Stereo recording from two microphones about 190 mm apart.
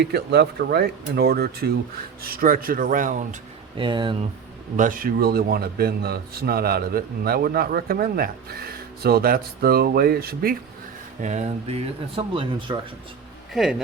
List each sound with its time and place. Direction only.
0.1 s a man's voice: 60° right (ahead or behind)
3.8 s speech: 25° right (ahead or behind)
4.8 s a man's voice: 45° right (ahead or behind)
11.2 s speech: 40° right (ahead or behind)
13.5 s speech: centre (ahead or behind)